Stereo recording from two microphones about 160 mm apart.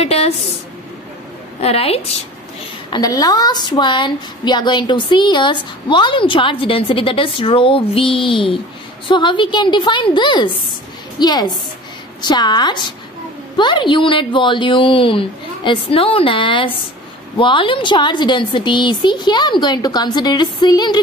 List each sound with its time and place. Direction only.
0.0 s a sound: 40° left (ahead or behind)
1.6 s a woman's voice: 40° left (ahead or behind)
2.9 s a woman's voice: 25° left (ahead or behind)